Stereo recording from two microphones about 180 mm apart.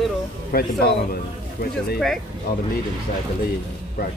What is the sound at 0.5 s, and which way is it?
Speech, 55° left (ahead or behind).